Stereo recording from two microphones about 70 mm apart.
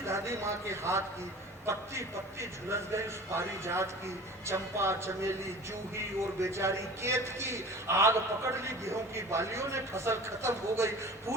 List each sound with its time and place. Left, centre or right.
0.0 s a man's voice: right